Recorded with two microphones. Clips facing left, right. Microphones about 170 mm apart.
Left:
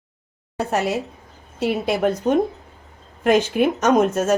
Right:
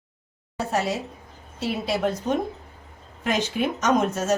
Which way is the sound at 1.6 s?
60° left (ahead or behind).